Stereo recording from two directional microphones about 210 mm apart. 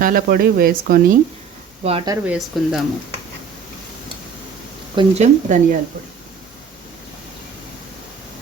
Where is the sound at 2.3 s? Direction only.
Centre (ahead or behind).